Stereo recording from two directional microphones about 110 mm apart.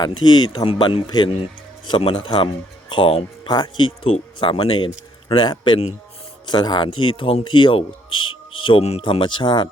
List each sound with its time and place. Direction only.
0.0 s speech: 40° left (ahead or behind)
0.6 s speech: 50° left (ahead or behind)
3.4 s speech: 40° left (ahead or behind)